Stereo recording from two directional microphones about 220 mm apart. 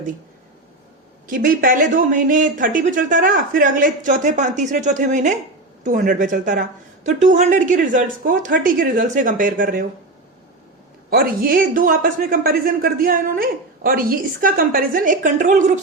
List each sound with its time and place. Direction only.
1.3 s a woman's voice: 40° right (ahead or behind)
11.1 s a woman's voice: 40° right (ahead or behind)